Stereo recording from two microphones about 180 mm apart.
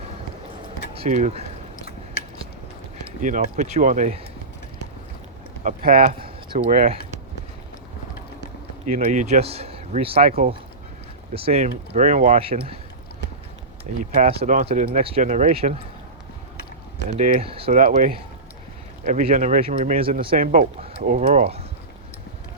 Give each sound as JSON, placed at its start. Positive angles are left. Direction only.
{"t": 0.9, "sound": "speech", "side_deg": -40}
{"t": 3.2, "sound": "speech", "side_deg": -45}
{"t": 5.6, "sound": "speech", "side_deg": -50}
{"t": 6.5, "sound": "speech", "side_deg": -45}
{"t": 8.9, "sound": "speech", "side_deg": -40}
{"t": 11.3, "sound": "speech", "side_deg": -35}
{"t": 12.4, "sound": "speech", "side_deg": -30}
{"t": 14.0, "sound": "speech", "side_deg": -40}
{"t": 14.3, "sound": "speech", "side_deg": -50}
{"t": 14.7, "sound": "speech", "side_deg": -35}
{"t": 17.2, "sound": "speech", "side_deg": -50}
{"t": 17.4, "sound": "speech", "side_deg": -30}
{"t": 17.7, "sound": "speech", "side_deg": -50}